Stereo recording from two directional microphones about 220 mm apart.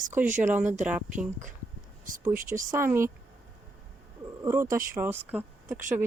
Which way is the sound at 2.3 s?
35° right (ahead or behind).